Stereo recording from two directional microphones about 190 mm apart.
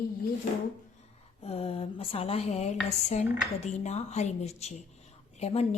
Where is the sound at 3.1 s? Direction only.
35° left (ahead or behind).